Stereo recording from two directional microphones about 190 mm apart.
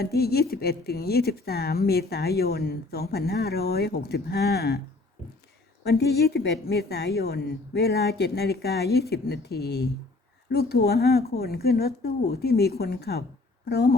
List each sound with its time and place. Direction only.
0.0 s a woman's voice: 55° left (ahead or behind)
5.8 s a woman's voice: 60° left (ahead or behind)